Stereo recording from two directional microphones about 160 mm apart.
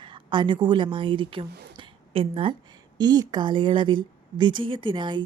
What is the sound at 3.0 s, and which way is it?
A woman's voice, 25° right (ahead or behind).